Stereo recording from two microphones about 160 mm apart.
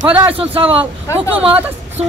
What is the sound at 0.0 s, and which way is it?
Speech, 10° right (ahead or behind).